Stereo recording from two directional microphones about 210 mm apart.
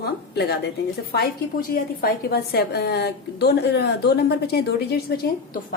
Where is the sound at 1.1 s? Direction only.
45° left (ahead or behind).